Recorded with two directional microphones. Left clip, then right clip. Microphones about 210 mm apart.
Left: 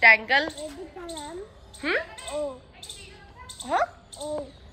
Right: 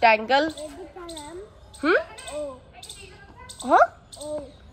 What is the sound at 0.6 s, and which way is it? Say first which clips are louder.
Speech: even; centre (ahead or behind).